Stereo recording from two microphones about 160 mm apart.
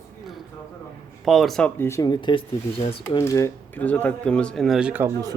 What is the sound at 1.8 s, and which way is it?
Speech, 20° left (ahead or behind).